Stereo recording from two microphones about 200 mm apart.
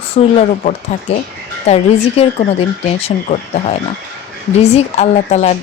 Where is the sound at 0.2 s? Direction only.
30° left (ahead or behind).